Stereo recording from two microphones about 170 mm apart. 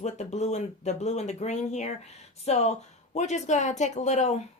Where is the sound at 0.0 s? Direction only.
40° left (ahead or behind).